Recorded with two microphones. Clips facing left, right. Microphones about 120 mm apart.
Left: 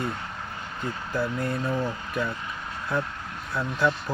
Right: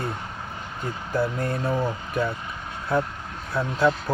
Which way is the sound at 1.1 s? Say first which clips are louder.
Right 3 dB; 40° right (ahead or behind).